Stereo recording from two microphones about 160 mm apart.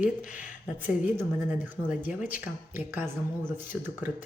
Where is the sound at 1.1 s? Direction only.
10° right (ahead or behind).